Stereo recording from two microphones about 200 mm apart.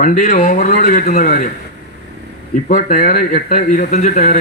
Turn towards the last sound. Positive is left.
turn(degrees=40)  # may be behind; listen again after turning